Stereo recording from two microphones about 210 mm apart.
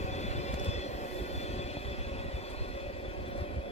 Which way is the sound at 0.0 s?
30° left (ahead or behind).